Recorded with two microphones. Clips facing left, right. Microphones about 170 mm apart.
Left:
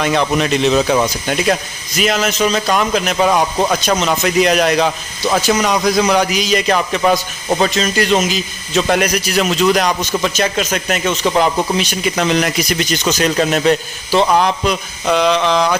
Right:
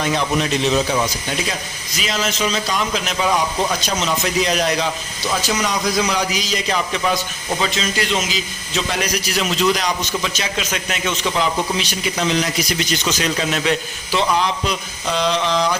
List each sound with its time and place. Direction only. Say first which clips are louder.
0.0 s a man's voice: left 4 dB; 65° left (ahead or behind)
13.1 s a man's voice: left 8 dB; 45° left (ahead or behind)
14.3 s a man's voice: left 6 dB; 55° left (ahead or behind)